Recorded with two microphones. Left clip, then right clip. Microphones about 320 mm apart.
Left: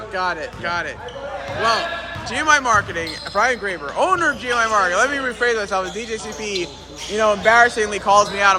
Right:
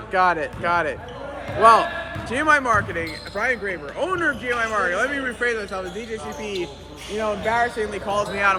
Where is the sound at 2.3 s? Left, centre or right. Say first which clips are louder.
Left 2 dB; centre.